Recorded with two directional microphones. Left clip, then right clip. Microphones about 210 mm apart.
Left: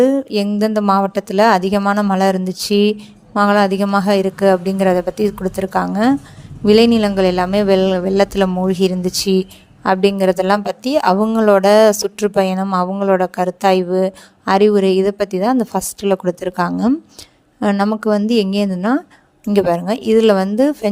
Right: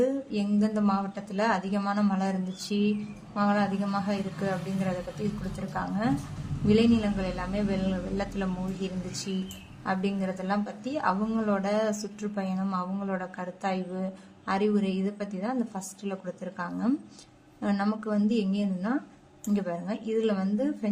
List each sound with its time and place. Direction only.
0.0 s a woman's voice: 50° left (ahead or behind)